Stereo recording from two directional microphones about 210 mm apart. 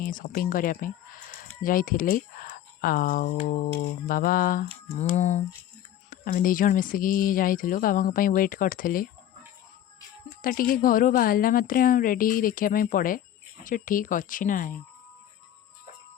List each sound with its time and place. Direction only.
0.0 s speech: 40° left (ahead or behind)
10.4 s speech: 40° left (ahead or behind)